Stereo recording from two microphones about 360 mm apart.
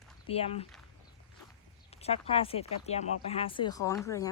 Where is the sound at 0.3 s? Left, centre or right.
Centre.